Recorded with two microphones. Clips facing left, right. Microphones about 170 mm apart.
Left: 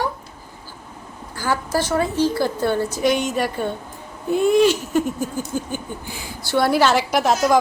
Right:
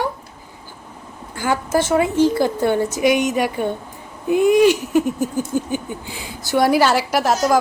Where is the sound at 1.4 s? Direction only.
20° right (ahead or behind).